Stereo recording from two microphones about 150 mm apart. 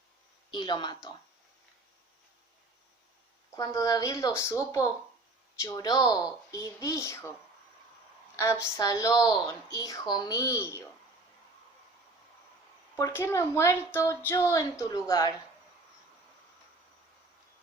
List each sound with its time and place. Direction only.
0.5 s a woman's voice: 30° left (ahead or behind)
3.5 s a woman's voice: 20° left (ahead or behind)
8.4 s a woman's voice: 15° left (ahead or behind)
13.0 s a woman's voice: 15° left (ahead or behind)